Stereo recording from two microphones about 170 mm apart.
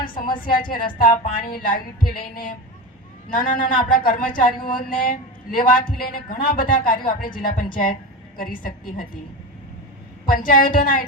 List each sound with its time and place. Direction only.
0.6 s speech: 55° left (ahead or behind)
10.2 s speech: 55° left (ahead or behind)